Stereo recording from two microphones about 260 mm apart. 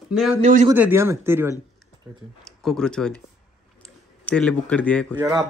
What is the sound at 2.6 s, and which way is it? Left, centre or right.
Speech, centre.